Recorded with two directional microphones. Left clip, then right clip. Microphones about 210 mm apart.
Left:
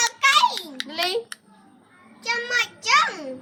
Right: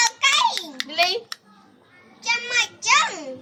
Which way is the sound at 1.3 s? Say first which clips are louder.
Right 3 dB; 5° right (ahead or behind).